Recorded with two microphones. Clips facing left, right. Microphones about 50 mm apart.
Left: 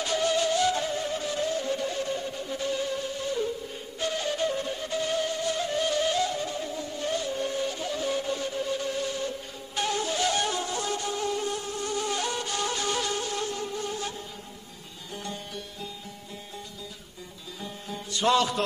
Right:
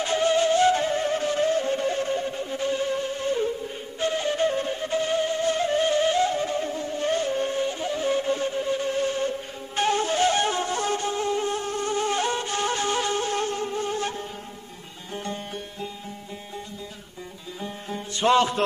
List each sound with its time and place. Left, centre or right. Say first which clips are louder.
0.0 s music: right 4 dB; right
4.0 s flute: right 5 dB; right
15.1 s music: right 5 dB; right
17.6 s music: right 4 dB; right